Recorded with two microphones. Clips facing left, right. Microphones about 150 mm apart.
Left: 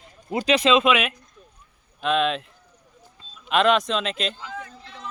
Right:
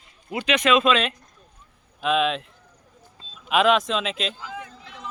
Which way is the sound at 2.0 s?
Centre (ahead or behind).